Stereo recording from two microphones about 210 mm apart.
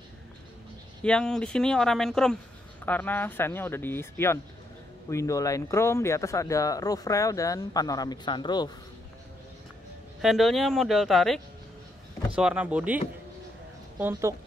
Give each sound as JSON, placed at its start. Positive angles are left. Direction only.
{"t": 1.0, "sound": "speech", "side_deg": 5}
{"t": 10.2, "sound": "speech", "side_deg": 0}